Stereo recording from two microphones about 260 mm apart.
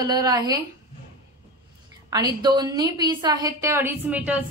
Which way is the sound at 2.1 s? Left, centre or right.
Centre.